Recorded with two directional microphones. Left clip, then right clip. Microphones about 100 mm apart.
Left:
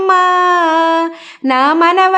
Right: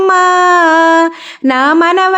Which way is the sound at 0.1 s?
35° right (ahead or behind).